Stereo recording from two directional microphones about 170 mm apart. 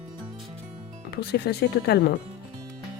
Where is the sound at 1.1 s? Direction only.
70° left (ahead or behind).